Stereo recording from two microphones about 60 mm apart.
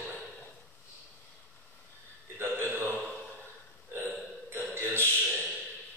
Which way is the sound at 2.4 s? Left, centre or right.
Right.